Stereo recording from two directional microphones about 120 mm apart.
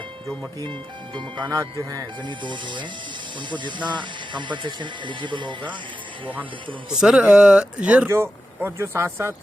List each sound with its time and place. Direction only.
0.6 s speech: 40° right (ahead or behind)
1.5 s speech: 30° right (ahead or behind)
6.9 s speech: 5° right (ahead or behind)
8.1 s speech: 20° right (ahead or behind)